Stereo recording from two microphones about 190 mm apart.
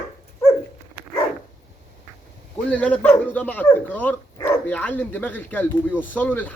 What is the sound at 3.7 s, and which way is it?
Speech, 10° left (ahead or behind).